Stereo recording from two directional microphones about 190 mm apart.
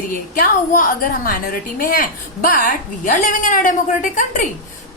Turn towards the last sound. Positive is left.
turn(degrees=45)  # may be behind; listen again after turning